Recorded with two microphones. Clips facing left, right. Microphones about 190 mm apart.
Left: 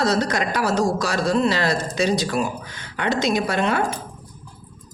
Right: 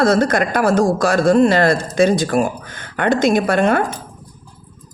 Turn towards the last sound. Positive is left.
turn(degrees=-50)  # may be behind; listen again after turning